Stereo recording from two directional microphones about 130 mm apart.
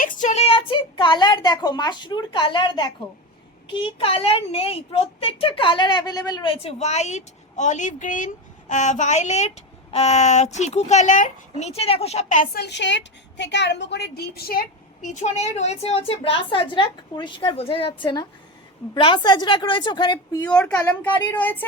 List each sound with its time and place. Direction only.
0.0 s a woman's voice: 80° left
8.7 s a child's voice: 70° left (ahead or behind)
15.0 s a child's voice: 65° left (ahead or behind); by 20.1 s 35° left (ahead or behind)
20.4 s speech: 10° left (ahead or behind)